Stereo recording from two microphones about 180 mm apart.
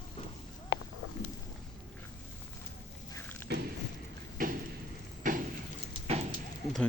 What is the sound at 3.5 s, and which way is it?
Thump, 65° right (ahead or behind).